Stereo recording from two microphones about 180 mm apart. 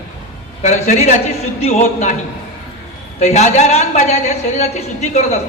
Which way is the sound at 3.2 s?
40° left (ahead or behind).